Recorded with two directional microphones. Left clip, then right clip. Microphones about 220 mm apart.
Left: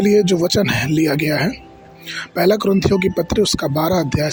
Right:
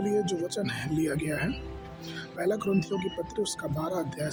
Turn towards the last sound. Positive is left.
turn(degrees=30)  # may be behind; listen again after turning